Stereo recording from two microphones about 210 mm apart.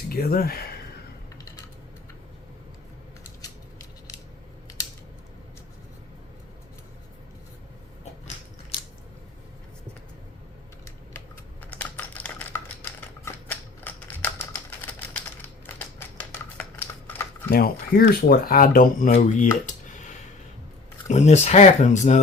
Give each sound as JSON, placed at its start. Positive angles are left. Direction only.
{"t": 0.1, "sound": "speech", "side_deg": 45}
{"t": 8.7, "sound": "biting", "side_deg": 25}
{"t": 11.6, "sound": "typing", "side_deg": 5}
{"t": 13.8, "sound": "typewriter", "side_deg": 10}
{"t": 16.6, "sound": "typing", "side_deg": 10}
{"t": 17.5, "sound": "speech", "side_deg": 45}